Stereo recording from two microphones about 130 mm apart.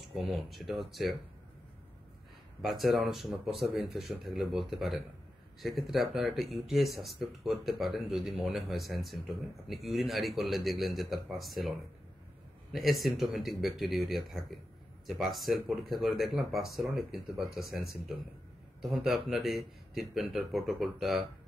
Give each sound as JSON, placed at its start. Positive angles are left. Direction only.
{"t": 0.0, "sound": "speech", "side_deg": 0}
{"t": 2.6, "sound": "speech", "side_deg": 0}
{"t": 12.7, "sound": "speech", "side_deg": 0}